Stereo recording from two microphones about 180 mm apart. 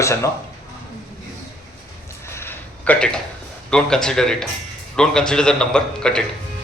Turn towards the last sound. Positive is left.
turn(degrees=5)  # may be behind; listen again after turning